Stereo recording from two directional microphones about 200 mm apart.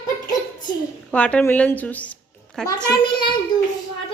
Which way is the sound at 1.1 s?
5° left (ahead or behind).